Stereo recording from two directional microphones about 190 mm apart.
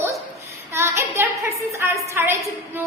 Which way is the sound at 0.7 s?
15° right (ahead or behind).